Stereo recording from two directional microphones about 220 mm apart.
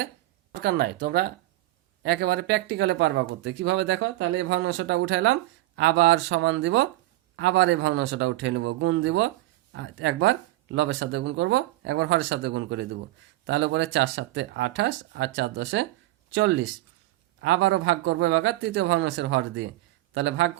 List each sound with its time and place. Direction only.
0.6 s speech: 45° right (ahead or behind); by 20.5 s 60° right (ahead or behind)